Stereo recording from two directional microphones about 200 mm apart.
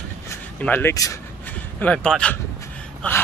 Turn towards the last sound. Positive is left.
turn(degrees=5)  # may be behind; listen again after turning